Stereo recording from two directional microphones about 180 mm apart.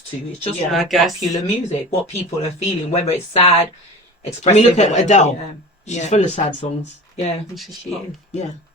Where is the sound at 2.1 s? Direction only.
35° left (ahead or behind).